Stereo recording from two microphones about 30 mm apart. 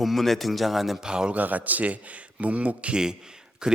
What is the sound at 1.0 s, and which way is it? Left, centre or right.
Speech, right.